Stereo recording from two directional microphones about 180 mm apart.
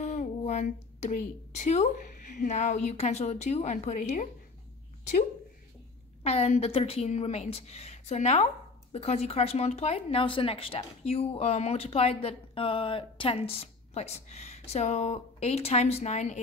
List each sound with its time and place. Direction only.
0.0 s speech: 40° left (ahead or behind)
6.2 s speech: 35° left (ahead or behind)